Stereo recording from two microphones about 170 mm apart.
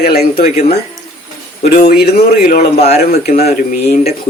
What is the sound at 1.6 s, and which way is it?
Speech, 45° left (ahead or behind).